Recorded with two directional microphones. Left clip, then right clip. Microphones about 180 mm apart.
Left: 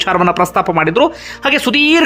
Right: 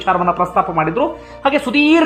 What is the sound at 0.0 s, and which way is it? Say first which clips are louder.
Speech: left 3 dB; 25° left (ahead or behind).